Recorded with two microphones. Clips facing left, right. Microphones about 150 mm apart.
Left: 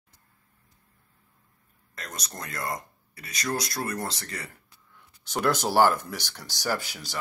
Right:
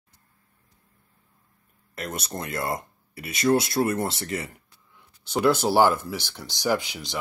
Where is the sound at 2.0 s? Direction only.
30° right (ahead or behind).